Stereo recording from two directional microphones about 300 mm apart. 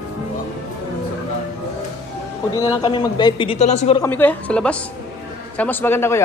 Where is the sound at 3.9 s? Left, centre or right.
Centre.